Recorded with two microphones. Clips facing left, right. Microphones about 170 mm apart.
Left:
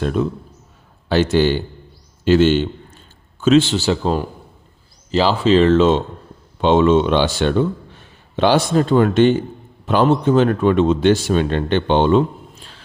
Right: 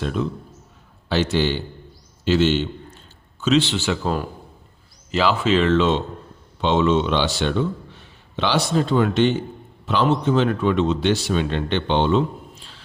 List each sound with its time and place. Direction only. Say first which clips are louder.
0.0 s a man's voice: left 5 dB; 45° left (ahead or behind)